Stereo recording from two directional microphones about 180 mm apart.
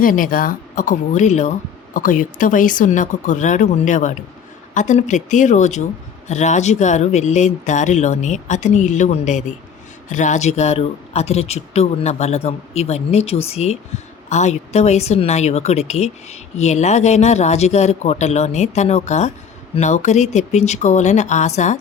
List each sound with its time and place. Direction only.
0.0 s speech: 50° left (ahead or behind)